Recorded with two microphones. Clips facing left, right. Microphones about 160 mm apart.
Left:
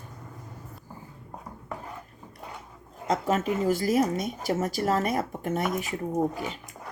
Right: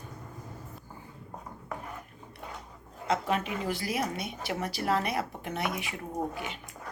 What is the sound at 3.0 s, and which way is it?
Speech, 45° left (ahead or behind).